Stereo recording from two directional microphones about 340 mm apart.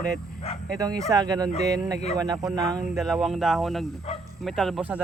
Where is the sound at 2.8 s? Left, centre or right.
Centre.